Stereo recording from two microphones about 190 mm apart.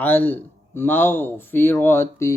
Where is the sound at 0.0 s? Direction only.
10° left (ahead or behind).